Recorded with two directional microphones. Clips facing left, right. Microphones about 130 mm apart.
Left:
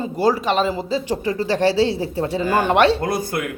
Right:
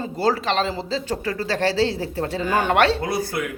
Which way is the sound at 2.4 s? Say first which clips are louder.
Left 3 dB; 40° left (ahead or behind).